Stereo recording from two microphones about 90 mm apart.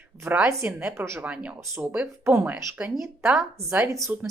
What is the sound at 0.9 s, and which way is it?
Speech, 30° right (ahead or behind).